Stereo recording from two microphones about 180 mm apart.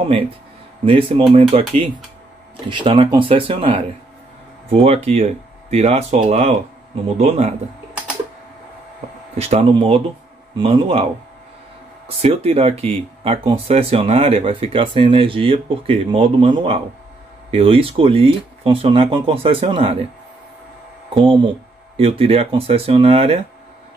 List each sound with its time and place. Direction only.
0.8 s speech: 30° right (ahead or behind)
9.4 s speech: 35° right (ahead or behind)
12.2 s speech: 35° right (ahead or behind)
21.1 s speech: 25° right (ahead or behind)